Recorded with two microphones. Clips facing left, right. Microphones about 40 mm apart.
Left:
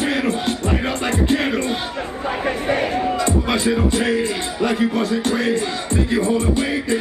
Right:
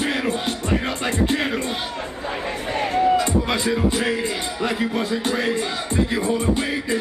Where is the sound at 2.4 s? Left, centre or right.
Left.